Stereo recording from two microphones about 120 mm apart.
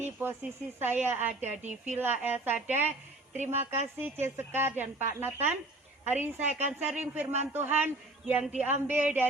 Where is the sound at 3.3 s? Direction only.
70° right (ahead or behind).